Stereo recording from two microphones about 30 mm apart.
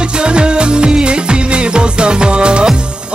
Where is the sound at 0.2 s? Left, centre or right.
Right.